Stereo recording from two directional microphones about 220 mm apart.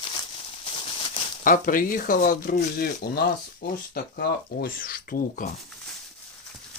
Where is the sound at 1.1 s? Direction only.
35° left (ahead or behind).